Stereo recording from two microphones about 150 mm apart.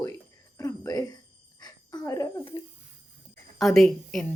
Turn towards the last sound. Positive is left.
turn(degrees=0)  # may be behind; listen again after turning